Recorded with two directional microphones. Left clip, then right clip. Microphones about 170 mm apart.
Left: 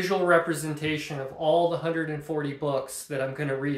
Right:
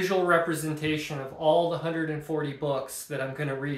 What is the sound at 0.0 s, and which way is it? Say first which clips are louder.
Speech: left 1 dB; 15° left (ahead or behind).